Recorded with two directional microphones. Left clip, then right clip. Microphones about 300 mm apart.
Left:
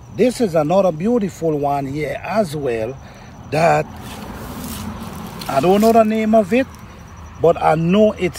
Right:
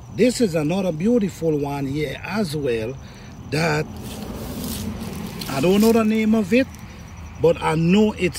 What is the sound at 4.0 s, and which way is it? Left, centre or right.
Boat, left.